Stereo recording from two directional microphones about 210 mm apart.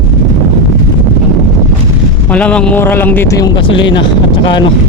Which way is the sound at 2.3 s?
5° left (ahead or behind).